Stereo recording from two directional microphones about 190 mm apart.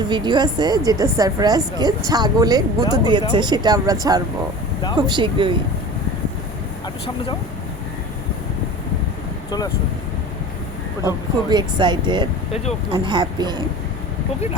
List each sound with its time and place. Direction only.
0.1 s a woman's voice: 20° right (ahead or behind)
9.5 s speech: 20° left (ahead or behind)
11.0 s a woman's voice: 20° right (ahead or behind)